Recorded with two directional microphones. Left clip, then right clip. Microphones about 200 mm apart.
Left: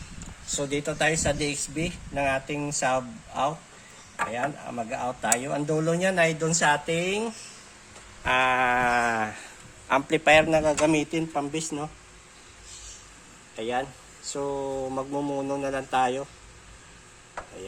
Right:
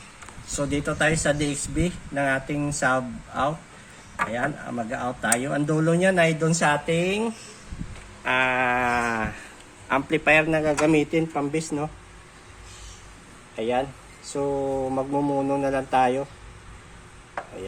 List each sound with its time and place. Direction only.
0.5 s speech: 10° left (ahead or behind)
13.6 s speech: 5° left (ahead or behind)